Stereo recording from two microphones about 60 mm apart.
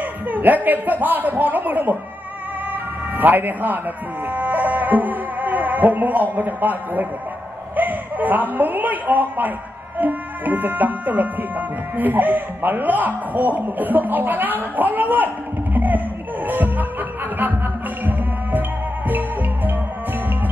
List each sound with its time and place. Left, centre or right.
0.0 s a sound: right
0.7 s a man's voice: right
16.4 s music: right
18.0 s music: right